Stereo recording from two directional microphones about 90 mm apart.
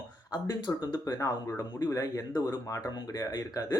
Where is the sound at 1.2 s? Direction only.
40° left (ahead or behind).